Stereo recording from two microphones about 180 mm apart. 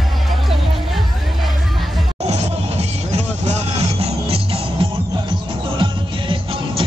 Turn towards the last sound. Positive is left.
turn(degrees=-30)  # may be behind; listen again after turning